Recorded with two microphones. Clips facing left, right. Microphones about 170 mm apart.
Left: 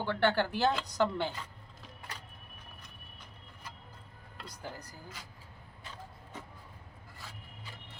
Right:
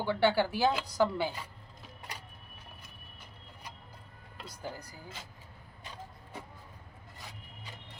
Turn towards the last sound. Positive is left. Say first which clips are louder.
# right 1 dB
turn(degrees=-15)  # may be behind; listen again after turning